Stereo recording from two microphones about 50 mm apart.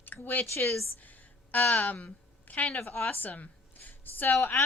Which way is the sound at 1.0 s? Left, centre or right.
Left.